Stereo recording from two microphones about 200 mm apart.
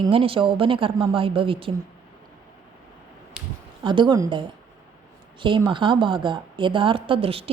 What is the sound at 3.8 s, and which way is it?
A woman's voice, 25° right (ahead or behind).